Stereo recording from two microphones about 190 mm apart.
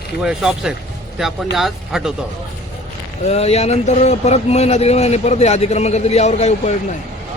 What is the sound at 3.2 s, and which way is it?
A man's voice, 35° left (ahead or behind).